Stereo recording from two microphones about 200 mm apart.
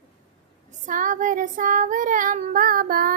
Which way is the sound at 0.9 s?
40° right (ahead or behind).